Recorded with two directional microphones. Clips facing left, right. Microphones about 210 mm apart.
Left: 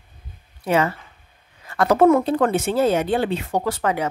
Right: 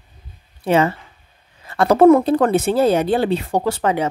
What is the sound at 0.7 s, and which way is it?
Speech, 25° right (ahead or behind).